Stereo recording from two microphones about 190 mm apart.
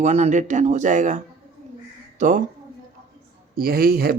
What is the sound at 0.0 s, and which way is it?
Speech, 35° right (ahead or behind).